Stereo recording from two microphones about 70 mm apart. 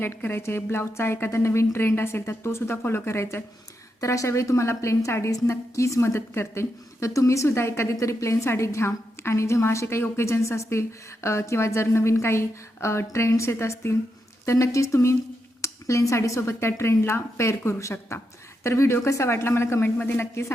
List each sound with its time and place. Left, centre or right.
0.0 s a woman's voice: left
4.0 s a woman's voice: left
7.4 s a woman's voice: left